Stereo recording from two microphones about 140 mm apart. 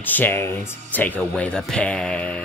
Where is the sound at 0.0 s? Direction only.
15° left (ahead or behind).